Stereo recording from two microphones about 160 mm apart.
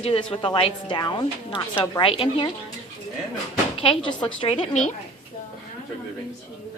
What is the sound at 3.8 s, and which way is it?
A woman's voice, 30° left (ahead or behind).